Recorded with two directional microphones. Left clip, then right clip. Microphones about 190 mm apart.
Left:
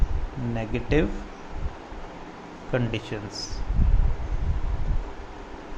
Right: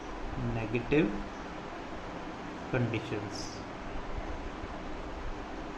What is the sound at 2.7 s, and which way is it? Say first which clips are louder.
Speech: left 6 dB; 40° left (ahead or behind).